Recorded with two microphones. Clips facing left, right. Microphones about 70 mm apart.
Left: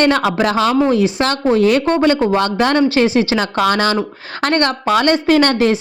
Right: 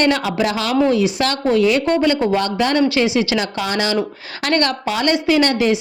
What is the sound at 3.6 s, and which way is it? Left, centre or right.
Speech, left.